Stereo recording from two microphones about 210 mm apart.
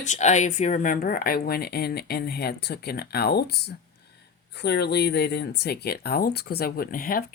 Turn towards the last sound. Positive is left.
turn(degrees=45)  # may be behind; listen again after turning